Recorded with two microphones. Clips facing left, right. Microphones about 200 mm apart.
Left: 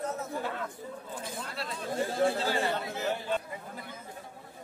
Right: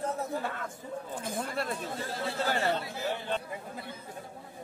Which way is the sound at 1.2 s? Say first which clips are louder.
Right 6 dB; 50° right (ahead or behind).